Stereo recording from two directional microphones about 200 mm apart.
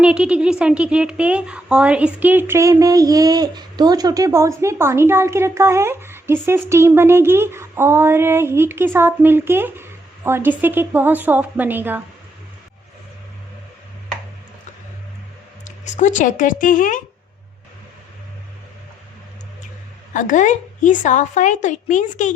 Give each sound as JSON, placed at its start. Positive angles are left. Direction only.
{"t": 0.0, "sound": "a woman's voice", "side_deg": -5}
{"t": 15.6, "sound": "a woman's voice", "side_deg": 35}
{"t": 20.1, "sound": "a woman's voice", "side_deg": 40}